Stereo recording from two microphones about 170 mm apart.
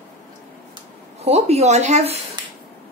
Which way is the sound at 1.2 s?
40° right (ahead or behind).